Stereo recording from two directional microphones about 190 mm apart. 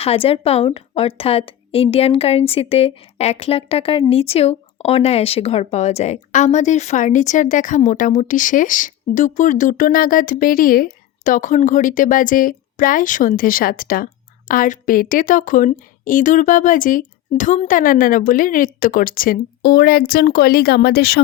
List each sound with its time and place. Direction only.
0.0 s a woman's voice: 30° left (ahead or behind); by 21.2 s 55° left (ahead or behind)